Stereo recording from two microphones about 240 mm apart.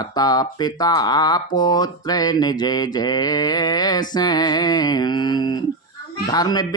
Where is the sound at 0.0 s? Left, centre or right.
Centre.